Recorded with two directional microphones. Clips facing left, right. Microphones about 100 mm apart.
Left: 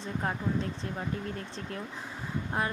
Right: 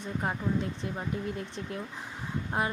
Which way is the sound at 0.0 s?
15° right (ahead or behind).